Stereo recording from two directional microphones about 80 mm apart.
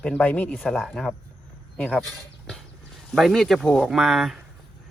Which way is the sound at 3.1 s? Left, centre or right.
Centre.